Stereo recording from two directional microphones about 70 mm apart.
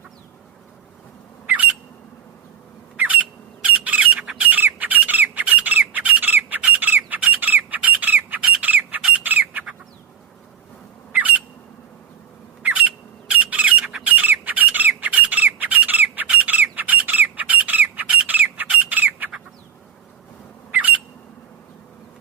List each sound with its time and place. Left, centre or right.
3.0 s squawk: right
11.1 s squawk: right
12.6 s squawk: right
20.7 s squawk: right